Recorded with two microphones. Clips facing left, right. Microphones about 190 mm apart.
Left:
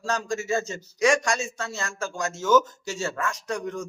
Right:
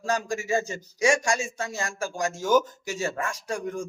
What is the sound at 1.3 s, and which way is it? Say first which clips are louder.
Speech: right 1 dB; 15° right (ahead or behind).